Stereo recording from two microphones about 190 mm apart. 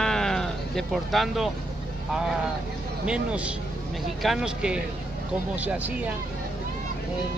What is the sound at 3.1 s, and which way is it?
Speech, 5° right (ahead or behind).